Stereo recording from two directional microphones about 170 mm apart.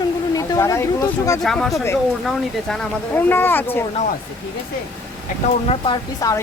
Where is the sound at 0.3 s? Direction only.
20° left (ahead or behind).